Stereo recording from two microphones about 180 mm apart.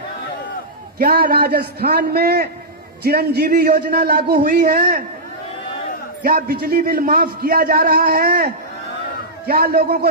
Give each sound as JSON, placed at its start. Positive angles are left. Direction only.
{"t": 0.9, "sound": "a man's voice", "side_deg": -60}
{"t": 6.2, "sound": "a man's voice", "side_deg": -50}